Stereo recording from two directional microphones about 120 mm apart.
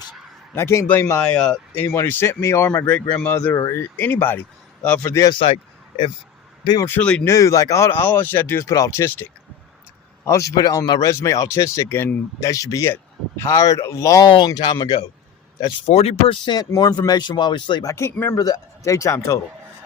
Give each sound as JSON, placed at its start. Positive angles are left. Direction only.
{"t": 0.5, "sound": "speech", "side_deg": 25}
{"t": 1.2, "sound": "speech", "side_deg": 5}
{"t": 3.5, "sound": "speech", "side_deg": 20}
{"t": 5.0, "sound": "speech", "side_deg": 25}
{"t": 5.3, "sound": "speech", "side_deg": 45}
{"t": 6.8, "sound": "speech", "side_deg": 15}
{"t": 7.3, "sound": "speech", "side_deg": 25}
{"t": 10.2, "sound": "speech", "side_deg": 25}
{"t": 14.3, "sound": "speech", "side_deg": 40}
{"t": 15.9, "sound": "speech", "side_deg": 60}
{"t": 16.5, "sound": "speech", "side_deg": 35}
{"t": 17.9, "sound": "speech", "side_deg": 20}